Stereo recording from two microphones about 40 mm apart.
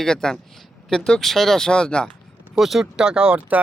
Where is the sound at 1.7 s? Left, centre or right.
Left.